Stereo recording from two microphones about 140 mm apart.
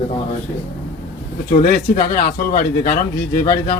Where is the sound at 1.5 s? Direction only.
60° left (ahead or behind).